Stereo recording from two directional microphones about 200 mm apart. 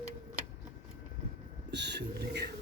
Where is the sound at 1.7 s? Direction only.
60° right (ahead or behind).